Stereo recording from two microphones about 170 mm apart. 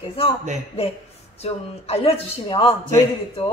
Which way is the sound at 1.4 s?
35° left (ahead or behind).